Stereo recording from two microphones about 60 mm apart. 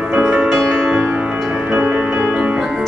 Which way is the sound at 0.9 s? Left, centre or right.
Right.